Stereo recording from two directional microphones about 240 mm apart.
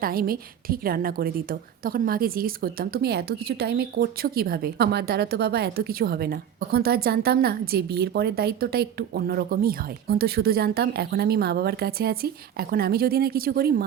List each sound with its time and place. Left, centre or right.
0.0 s a woman's voice: right